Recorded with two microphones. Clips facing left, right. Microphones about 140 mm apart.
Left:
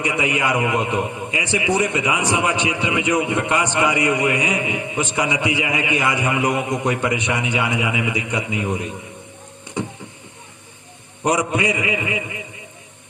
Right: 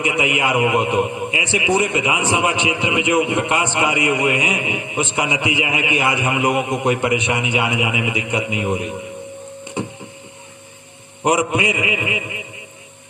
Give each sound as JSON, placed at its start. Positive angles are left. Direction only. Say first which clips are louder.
{"t": 0.0, "sound": "a man's voice", "louder": "right 1 dB", "side_deg": -15}
{"t": 11.2, "sound": "a man's voice", "louder": "right 2 dB", "side_deg": -15}